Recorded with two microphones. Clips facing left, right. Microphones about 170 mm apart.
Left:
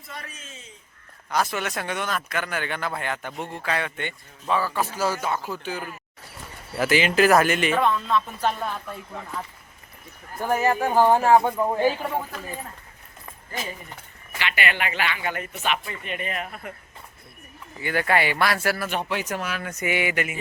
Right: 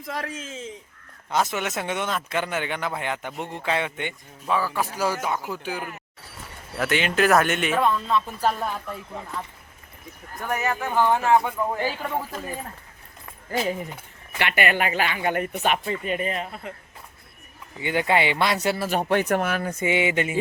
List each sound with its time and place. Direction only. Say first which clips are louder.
0.0 s a man's voice: right 9 dB; 90° right
1.3 s speech: right 1 dB; 20° right (ahead or behind)
6.7 s speech: left 3 dB; centre (ahead or behind)
10.4 s speech: left 5 dB; 30° left (ahead or behind)
14.3 s speech: right 4 dB; 50° right (ahead or behind)
15.8 s speech: right 6 dB; 35° right (ahead or behind)
17.7 s speech: right 1 dB; 20° right (ahead or behind)
18.9 s speech: right 6 dB; 50° right (ahead or behind)
19.6 s speech: right 3 dB; 25° right (ahead or behind)